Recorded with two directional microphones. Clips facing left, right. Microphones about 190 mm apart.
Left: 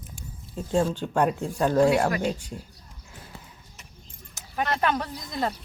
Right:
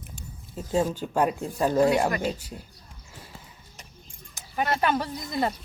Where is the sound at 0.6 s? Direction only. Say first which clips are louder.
Left 1 dB; 5° right (ahead or behind).